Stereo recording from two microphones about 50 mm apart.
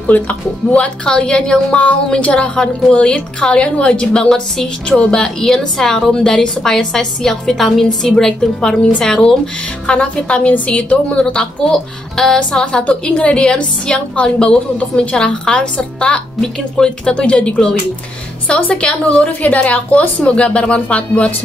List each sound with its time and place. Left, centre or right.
0.0 s a woman's voice: left
0.7 s a woman's voice: centre
11.3 s speech: centre
17.1 s a woman's voice: left